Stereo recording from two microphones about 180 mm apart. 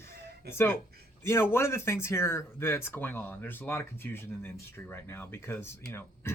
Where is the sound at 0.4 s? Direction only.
15° left (ahead or behind).